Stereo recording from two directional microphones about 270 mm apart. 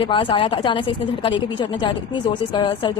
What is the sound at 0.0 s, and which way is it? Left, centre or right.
A woman's voice, centre.